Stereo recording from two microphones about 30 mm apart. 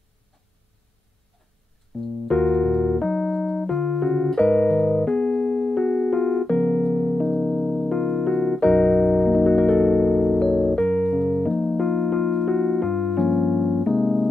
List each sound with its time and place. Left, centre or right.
2.2 s keyboard: left